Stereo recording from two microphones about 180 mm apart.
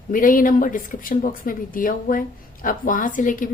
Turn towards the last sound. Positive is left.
turn(degrees=45)  # may be behind; listen again after turning